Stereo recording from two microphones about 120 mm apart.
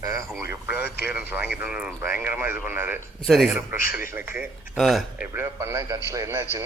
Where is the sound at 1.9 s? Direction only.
20° right (ahead or behind).